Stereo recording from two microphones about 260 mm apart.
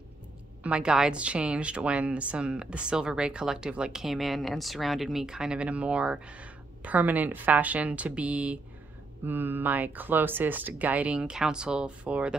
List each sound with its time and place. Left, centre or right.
0.7 s speech: centre